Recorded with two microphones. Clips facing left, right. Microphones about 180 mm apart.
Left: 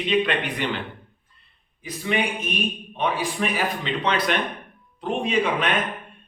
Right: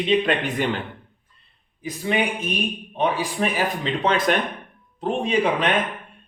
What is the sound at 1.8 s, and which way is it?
A man's voice, 40° right (ahead or behind).